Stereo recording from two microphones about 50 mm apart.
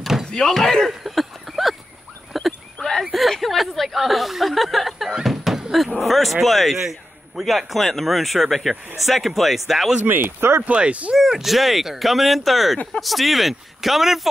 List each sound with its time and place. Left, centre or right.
0.0 s slam: centre
0.3 s a sound: centre
2.9 s a man's voice: centre
10.0 s speech: right
10.6 s speech: right
11.1 s a man's voice: centre